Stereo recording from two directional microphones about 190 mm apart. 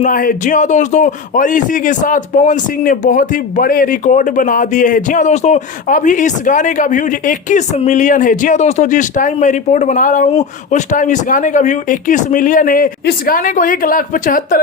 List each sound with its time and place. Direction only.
0.0 s a man's voice: 45° left (ahead or behind)